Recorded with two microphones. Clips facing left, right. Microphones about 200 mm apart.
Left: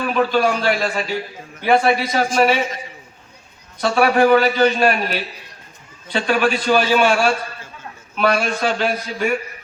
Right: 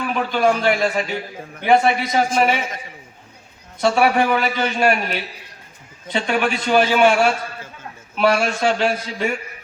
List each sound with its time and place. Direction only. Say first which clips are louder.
0.1 s a man's voice: left 1 dB; 20° right (ahead or behind)
3.8 s a man's voice: left 1 dB; 20° right (ahead or behind)
6.1 s a man's voice: left 2 dB; 20° right (ahead or behind)